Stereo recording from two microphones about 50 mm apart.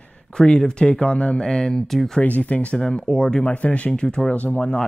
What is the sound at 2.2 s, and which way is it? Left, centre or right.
Speech, left.